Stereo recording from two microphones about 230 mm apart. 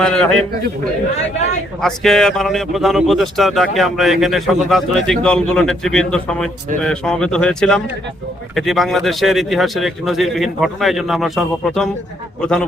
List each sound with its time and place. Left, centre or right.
0.0 s a man's voice: centre
1.8 s a man's voice: centre